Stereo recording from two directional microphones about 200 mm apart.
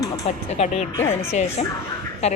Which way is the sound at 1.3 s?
35° left (ahead or behind).